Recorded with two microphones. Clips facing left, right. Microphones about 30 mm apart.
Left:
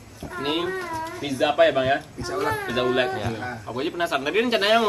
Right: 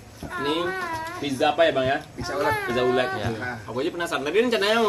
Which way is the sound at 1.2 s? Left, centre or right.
Centre.